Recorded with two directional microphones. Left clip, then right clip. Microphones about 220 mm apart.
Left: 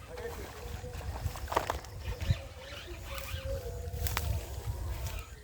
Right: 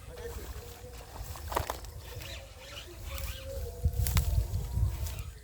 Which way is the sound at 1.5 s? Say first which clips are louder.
Left 2 dB; 25° right (ahead or behind).